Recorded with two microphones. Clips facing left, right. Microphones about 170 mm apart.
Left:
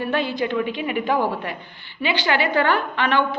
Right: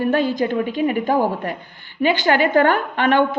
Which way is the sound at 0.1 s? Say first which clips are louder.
Right 4 dB; 45° right (ahead or behind).